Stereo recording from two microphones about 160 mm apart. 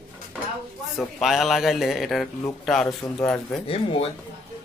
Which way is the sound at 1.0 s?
Centre (ahead or behind).